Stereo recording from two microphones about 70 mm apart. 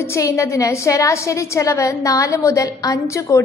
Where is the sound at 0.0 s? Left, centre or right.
Left.